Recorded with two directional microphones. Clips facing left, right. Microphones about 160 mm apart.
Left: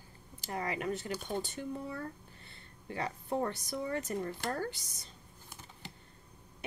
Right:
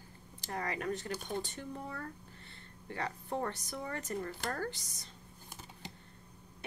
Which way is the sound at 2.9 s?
15° left (ahead or behind).